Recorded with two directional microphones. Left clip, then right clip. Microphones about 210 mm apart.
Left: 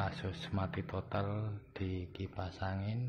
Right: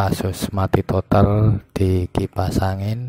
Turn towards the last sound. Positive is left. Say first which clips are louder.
# right 18 dB
turn(degrees=-50)  # may be behind; listen again after turning